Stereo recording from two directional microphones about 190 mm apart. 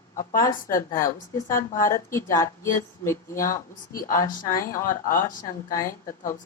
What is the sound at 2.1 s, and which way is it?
A woman's voice, 15° left (ahead or behind).